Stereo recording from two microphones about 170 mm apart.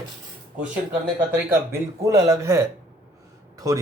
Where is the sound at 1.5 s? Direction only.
20° right (ahead or behind).